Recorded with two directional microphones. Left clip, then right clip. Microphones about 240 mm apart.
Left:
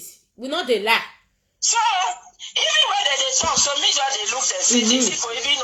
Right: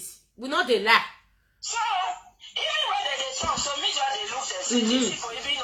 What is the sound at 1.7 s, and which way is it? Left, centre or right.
Speech, left.